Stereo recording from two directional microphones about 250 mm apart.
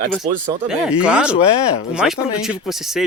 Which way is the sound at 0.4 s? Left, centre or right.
Centre.